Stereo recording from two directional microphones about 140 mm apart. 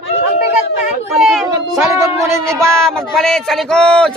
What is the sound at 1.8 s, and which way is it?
Speech, 20° right (ahead or behind).